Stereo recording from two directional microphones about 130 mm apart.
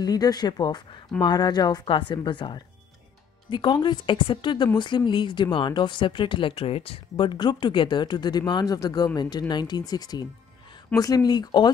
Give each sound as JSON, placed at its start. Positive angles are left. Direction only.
{"t": 0.0, "sound": "speech", "side_deg": 30}